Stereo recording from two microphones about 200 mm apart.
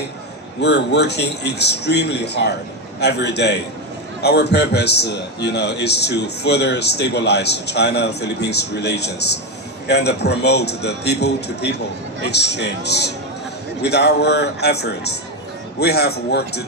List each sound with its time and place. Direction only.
0.6 s a man's voice: 60° left (ahead or behind)